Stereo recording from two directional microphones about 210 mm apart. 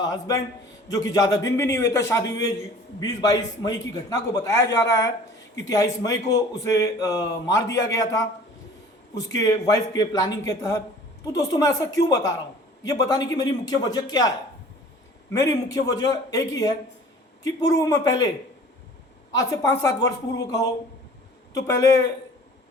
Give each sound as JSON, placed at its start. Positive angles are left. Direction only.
{"t": 0.0, "sound": "a man's voice", "side_deg": 20}
{"t": 19.3, "sound": "a man's voice", "side_deg": 15}